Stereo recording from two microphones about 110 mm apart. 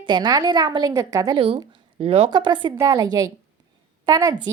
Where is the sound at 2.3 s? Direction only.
45° right (ahead or behind).